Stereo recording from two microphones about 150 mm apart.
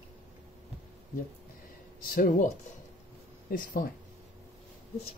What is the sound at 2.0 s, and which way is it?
Speech, 80° left.